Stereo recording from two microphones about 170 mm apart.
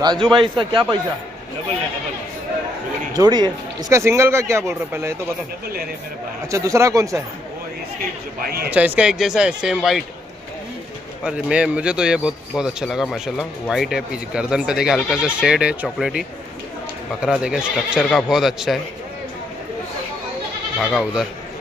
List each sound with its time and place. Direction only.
0.0 s speech: 25° right (ahead or behind)
3.2 s a man's voice: 25° right (ahead or behind)
6.5 s speech: 20° right (ahead or behind)
8.4 s speech: 65° right (ahead or behind)
8.6 s a man's voice: 10° right (ahead or behind)
11.2 s a man's voice: 5° right (ahead or behind)
20.8 s a man's voice: 5° right (ahead or behind)